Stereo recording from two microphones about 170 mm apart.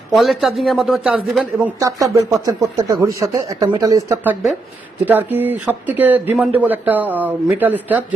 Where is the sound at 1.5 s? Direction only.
20° right (ahead or behind).